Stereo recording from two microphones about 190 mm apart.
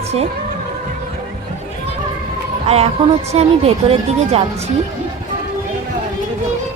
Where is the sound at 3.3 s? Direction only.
35° right (ahead or behind).